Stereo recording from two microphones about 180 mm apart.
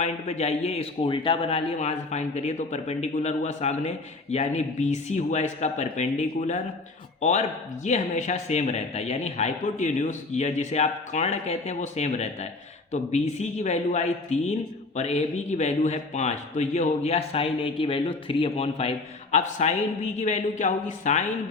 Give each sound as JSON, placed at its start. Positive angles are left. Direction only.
{"t": 0.0, "sound": "a man's voice", "side_deg": 35}